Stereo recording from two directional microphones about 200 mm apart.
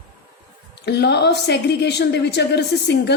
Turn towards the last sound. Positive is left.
turn(degrees=60)  # may be behind; listen again after turning